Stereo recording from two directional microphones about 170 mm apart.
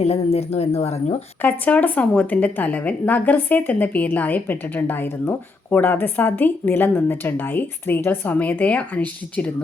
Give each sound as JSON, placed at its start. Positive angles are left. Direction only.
{"t": 0.0, "sound": "speech", "side_deg": 35}
{"t": 1.4, "sound": "speech", "side_deg": 10}